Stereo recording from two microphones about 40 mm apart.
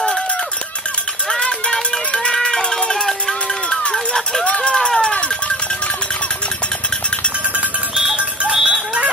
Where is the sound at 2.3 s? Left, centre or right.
Centre.